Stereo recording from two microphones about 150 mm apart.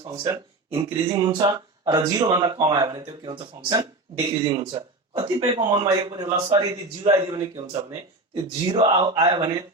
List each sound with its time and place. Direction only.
0.0 s speech: 25° right (ahead or behind)
8.7 s speech: 30° right (ahead or behind)